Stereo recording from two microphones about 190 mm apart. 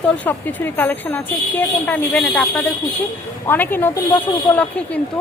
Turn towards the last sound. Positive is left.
turn(degrees=5)  # may be behind; listen again after turning